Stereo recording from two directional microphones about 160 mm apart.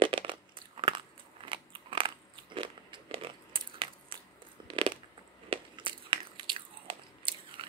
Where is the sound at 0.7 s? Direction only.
30° right (ahead or behind).